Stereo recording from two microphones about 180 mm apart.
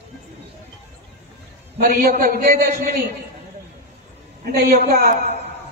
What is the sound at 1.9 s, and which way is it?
A man's voice, 55° right (ahead or behind).